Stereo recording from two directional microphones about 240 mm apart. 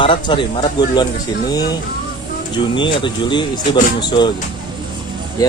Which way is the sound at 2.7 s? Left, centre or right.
Centre.